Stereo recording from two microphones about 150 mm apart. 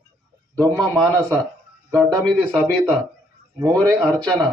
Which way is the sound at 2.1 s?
5° left (ahead or behind).